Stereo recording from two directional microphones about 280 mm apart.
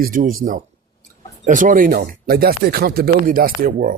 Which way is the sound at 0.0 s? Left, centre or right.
Right.